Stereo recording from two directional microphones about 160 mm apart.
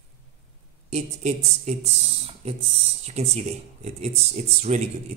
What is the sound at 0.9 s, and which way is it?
Speech, 45° right (ahead or behind).